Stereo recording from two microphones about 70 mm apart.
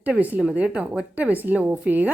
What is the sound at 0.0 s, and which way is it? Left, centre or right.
A woman's voice, right.